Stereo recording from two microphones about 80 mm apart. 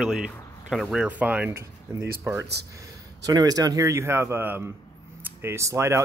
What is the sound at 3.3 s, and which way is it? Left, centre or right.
Speech, right.